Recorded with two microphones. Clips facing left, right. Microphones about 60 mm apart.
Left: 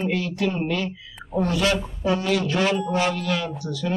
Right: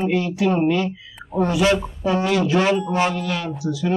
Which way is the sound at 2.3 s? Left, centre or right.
Centre.